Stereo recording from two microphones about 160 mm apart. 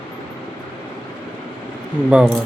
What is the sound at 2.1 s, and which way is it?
Speech, 5° right (ahead or behind).